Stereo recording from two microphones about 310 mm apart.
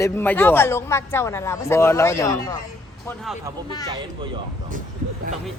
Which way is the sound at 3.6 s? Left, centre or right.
Centre.